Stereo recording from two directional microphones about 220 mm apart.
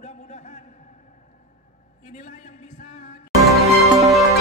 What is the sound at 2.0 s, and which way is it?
A man's voice, 35° left (ahead or behind).